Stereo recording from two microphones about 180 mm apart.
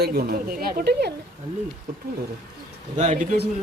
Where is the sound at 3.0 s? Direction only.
40° right (ahead or behind).